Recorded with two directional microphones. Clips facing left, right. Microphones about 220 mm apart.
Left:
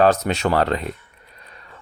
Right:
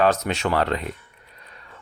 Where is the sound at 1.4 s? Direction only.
35° left (ahead or behind).